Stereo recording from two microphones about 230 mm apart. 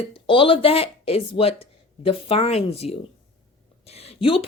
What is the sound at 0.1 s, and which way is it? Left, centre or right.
A woman's voice, left.